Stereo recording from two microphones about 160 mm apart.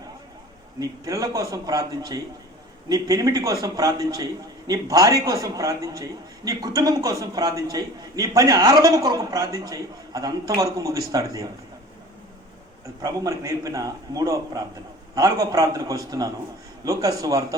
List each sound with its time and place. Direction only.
0.8 s a man's voice: 20° right (ahead or behind)
13.0 s a man's voice: 20° right (ahead or behind)